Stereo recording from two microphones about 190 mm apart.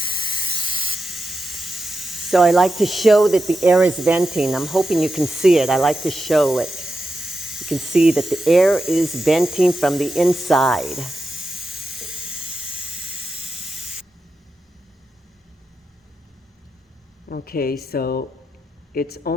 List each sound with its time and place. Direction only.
0.0 s spray: 25° left (ahead or behind)
0.9 s speech: centre (ahead or behind)
13.3 s steam: 5° right (ahead or behind)
17.2 s a sound: 50° left (ahead or behind)
17.8 s speech: 55° left (ahead or behind)